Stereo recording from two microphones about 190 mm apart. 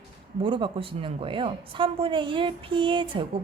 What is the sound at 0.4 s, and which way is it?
A woman's voice, 25° right (ahead or behind).